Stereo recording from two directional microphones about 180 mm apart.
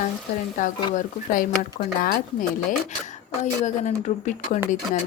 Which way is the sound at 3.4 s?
40° left (ahead or behind).